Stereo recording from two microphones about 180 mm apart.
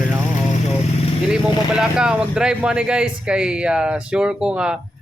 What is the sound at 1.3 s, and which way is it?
Speech, 5° right (ahead or behind).